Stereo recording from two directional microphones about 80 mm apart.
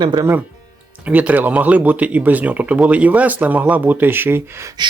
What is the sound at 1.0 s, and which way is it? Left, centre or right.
Speech, centre.